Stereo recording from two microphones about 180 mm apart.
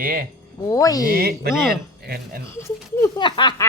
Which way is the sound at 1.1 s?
60° right (ahead or behind).